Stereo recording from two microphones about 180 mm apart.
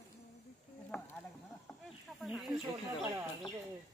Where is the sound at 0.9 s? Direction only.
5° left (ahead or behind).